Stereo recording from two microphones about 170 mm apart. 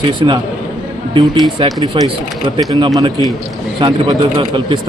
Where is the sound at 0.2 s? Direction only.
30° right (ahead or behind).